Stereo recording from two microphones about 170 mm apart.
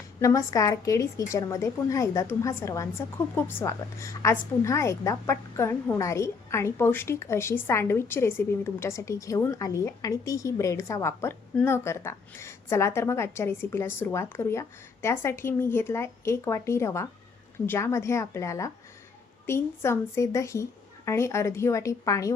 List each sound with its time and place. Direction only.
0.2 s a woman's voice: 20° left (ahead or behind)